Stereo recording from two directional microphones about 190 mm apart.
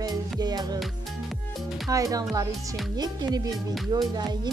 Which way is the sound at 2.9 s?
20° right (ahead or behind).